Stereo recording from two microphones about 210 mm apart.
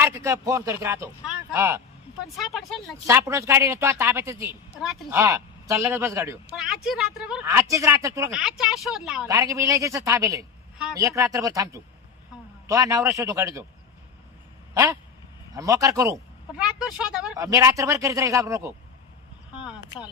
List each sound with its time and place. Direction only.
0.0 s speech: 10° right (ahead or behind)
2.3 s speech: centre (ahead or behind)
3.1 s speech: 10° right (ahead or behind)
6.6 s speech: centre (ahead or behind)
7.4 s speech: 15° right (ahead or behind)
8.3 s speech: centre (ahead or behind)
9.2 s speech: 15° right (ahead or behind)
14.7 s a sound: 15° right (ahead or behind)
15.5 s speech: 15° right (ahead or behind)
16.1 s speech: centre (ahead or behind)
17.3 s speech: 15° right (ahead or behind)